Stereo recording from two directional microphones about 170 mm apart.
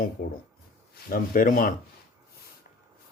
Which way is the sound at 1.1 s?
55° left (ahead or behind).